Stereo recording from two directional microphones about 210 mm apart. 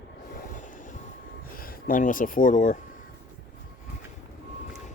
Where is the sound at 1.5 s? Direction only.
40° left (ahead or behind).